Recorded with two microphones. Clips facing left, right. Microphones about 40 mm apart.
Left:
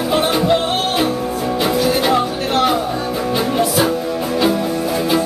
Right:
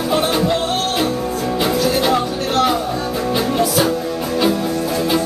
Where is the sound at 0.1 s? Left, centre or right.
Centre.